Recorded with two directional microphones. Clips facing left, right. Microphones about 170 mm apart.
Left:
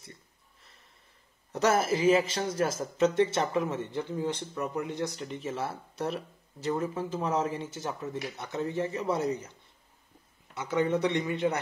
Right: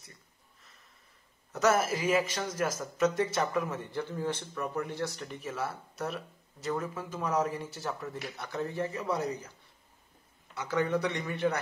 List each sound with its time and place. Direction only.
1.5 s a man's voice: 30° left (ahead or behind)
10.5 s a man's voice: 20° left (ahead or behind)